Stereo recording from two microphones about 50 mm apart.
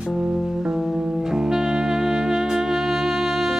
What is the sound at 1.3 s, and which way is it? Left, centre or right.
Music, centre.